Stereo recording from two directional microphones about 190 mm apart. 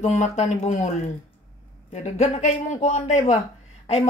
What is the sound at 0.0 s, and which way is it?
Speech, 40° left (ahead or behind).